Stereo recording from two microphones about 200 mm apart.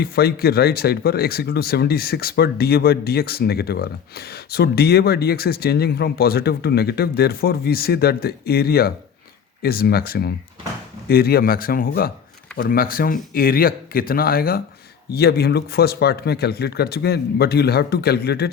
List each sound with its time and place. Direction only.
0.0 s speech: 50° left (ahead or behind)